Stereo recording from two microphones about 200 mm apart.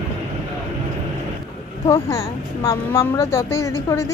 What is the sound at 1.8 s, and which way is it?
Speech, 15° left (ahead or behind).